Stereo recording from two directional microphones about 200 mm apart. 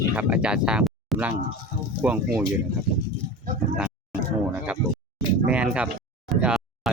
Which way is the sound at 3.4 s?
45° right (ahead or behind).